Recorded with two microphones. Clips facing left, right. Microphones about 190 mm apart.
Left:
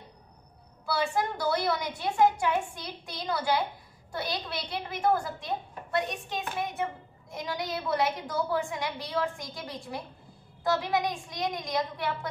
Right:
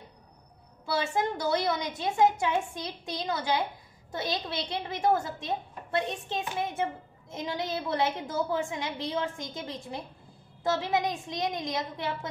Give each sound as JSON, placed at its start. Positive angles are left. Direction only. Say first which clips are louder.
{"t": 0.8, "sound": "a woman's voice", "louder": "even", "side_deg": -25}